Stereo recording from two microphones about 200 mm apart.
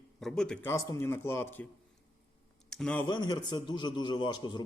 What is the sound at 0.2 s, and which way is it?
A man's voice, centre (ahead or behind).